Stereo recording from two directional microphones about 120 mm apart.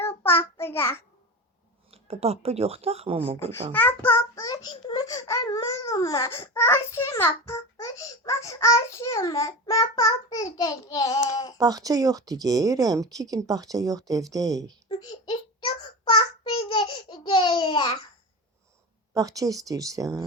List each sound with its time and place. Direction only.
0.0 s child singing: 20° left (ahead or behind)
1.9 s speech: 55° right (ahead or behind)
3.7 s a child's voice: 15° left (ahead or behind); by 11.5 s 30° left (ahead or behind)
11.5 s speech: 30° right (ahead or behind)
16.0 s a child's voice: 40° left (ahead or behind)
19.1 s speech: 30° right (ahead or behind)